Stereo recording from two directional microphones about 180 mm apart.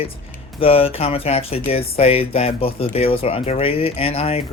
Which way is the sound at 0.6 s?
30° left (ahead or behind).